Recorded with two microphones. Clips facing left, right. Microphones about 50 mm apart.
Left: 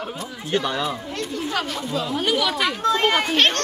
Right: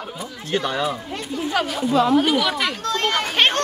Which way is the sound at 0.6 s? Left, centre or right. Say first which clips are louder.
Right 1 dB; centre.